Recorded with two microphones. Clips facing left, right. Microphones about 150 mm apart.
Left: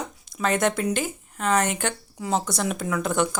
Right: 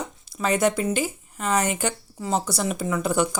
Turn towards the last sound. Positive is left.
turn(degrees=-5)  # may be behind; listen again after turning